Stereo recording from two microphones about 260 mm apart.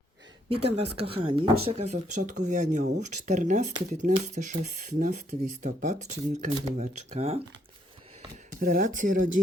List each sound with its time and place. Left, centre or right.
0.5 s speech: right
8.6 s speech: right